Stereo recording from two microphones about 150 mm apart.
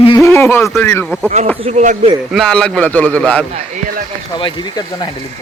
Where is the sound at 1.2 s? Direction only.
40° right (ahead or behind).